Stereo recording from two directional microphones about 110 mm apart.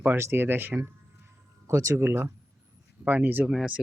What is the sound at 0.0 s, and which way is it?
Speech, 20° right (ahead or behind).